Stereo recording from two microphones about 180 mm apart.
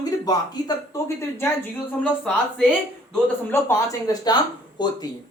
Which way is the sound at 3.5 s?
15° left (ahead or behind).